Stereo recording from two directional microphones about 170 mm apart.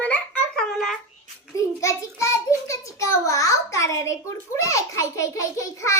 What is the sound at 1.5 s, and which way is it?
Child singing, 20° left (ahead or behind).